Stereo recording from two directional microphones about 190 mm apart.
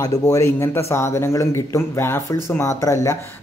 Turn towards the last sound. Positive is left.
turn(degrees=15)  # may be behind; listen again after turning